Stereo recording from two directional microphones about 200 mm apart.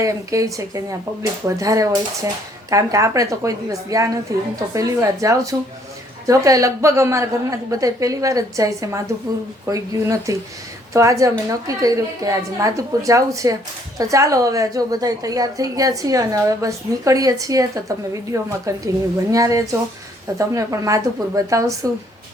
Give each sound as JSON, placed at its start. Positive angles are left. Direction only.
{"t": 0.0, "sound": "a woman's voice", "side_deg": -15}